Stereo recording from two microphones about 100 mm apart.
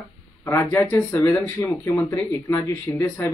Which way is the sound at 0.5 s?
20° left (ahead or behind).